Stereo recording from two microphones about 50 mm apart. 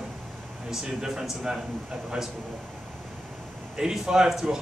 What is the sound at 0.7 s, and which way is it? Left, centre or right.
Speech, centre.